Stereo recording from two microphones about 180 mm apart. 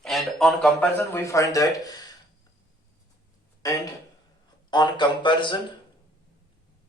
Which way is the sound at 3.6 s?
20° left (ahead or behind).